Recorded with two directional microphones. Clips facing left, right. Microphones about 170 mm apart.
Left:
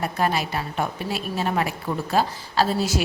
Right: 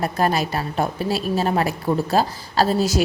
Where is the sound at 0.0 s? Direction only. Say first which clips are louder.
Right 3 dB; 40° right (ahead or behind).